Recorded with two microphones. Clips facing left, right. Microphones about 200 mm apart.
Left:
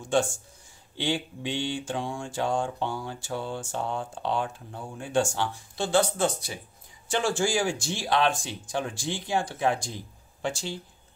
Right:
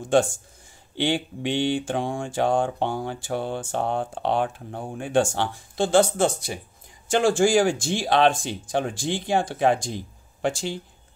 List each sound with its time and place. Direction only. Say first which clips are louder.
0.0 s speech: right 5 dB; 55° right (ahead or behind)